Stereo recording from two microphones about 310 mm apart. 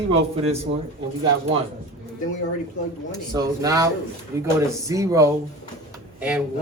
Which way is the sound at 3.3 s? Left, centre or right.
Centre.